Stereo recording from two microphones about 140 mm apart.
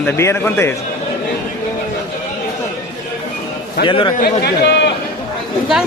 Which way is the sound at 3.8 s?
35° left (ahead or behind).